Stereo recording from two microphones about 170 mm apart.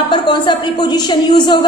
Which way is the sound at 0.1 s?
25° left (ahead or behind).